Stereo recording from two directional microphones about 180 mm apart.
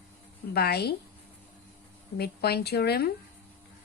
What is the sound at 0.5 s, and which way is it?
Speech, 60° left (ahead or behind).